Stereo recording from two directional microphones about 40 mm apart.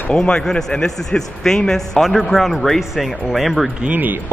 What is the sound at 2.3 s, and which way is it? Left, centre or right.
Speech, centre.